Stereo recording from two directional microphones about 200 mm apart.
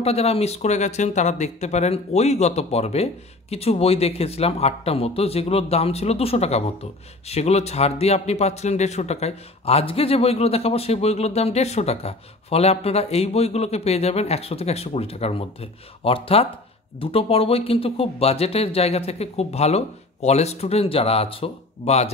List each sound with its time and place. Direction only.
0.0 s speech: 30° left (ahead or behind)